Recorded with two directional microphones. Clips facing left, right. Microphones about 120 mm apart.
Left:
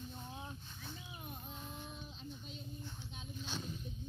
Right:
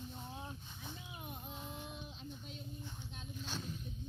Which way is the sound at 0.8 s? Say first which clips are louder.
Right 1 dB; 15° right (ahead or behind).